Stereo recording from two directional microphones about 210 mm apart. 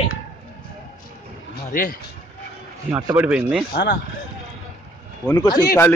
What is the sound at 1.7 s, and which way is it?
Speech, 40° left (ahead or behind).